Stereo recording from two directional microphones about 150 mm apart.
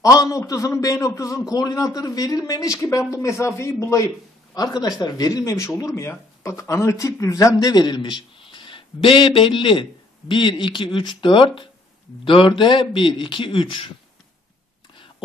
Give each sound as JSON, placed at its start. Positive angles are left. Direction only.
{"t": 0.0, "sound": "a man's voice", "side_deg": 25}